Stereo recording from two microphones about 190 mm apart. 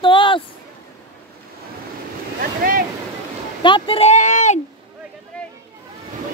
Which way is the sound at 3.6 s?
25° left (ahead or behind).